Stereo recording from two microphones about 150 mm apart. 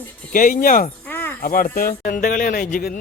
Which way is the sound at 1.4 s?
70° left (ahead or behind).